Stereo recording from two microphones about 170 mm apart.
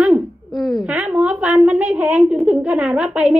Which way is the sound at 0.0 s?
Centre (ahead or behind).